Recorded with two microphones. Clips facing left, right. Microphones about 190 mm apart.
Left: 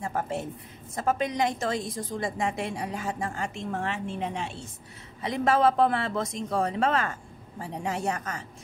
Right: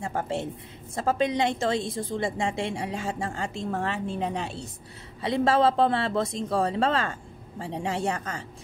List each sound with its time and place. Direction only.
0.0 s a woman's voice: 30° right (ahead or behind)